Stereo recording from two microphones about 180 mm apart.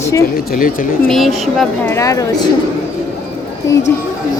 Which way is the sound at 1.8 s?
15° left (ahead or behind).